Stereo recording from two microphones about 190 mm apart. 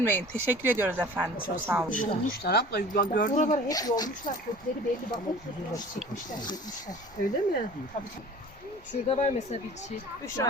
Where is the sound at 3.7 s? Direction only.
20° left (ahead or behind).